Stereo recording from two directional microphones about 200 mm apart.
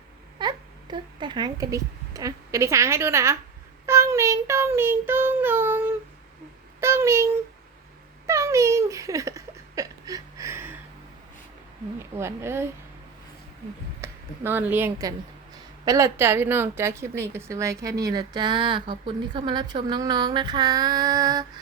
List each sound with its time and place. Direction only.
0.3 s speech: 20° right (ahead or behind)
3.8 s child singing: 15° right (ahead or behind)
6.7 s a sound: 15° right (ahead or behind)
8.3 s a sound: 15° right (ahead or behind)
11.9 s a woman's voice: 10° right (ahead or behind)
14.0 s a woman's voice: 10° right (ahead or behind)